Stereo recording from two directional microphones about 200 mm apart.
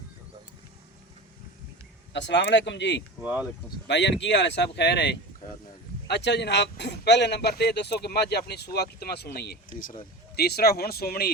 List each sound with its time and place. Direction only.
2.1 s a man's voice: 60° left (ahead or behind)
3.2 s speech: 5° right (ahead or behind)
3.8 s a man's voice: 60° left (ahead or behind)